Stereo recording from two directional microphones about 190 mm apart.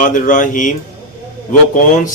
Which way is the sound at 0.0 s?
45° left (ahead or behind).